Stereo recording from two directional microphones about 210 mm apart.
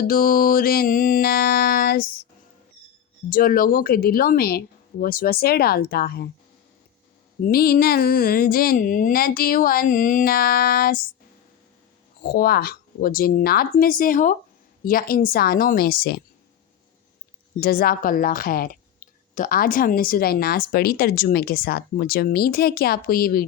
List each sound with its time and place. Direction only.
0.0 s speech: 45° left (ahead or behind)
3.2 s speech: 45° left (ahead or behind)
7.4 s speech: 45° left (ahead or behind)
12.2 s speech: 45° left (ahead or behind)
17.6 s speech: 45° left (ahead or behind)